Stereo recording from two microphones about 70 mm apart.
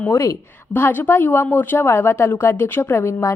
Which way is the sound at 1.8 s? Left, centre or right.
Left.